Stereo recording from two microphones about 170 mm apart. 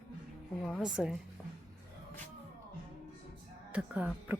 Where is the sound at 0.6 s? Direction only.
Centre (ahead or behind).